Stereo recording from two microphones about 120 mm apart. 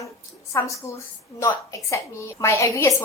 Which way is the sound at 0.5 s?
25° left (ahead or behind).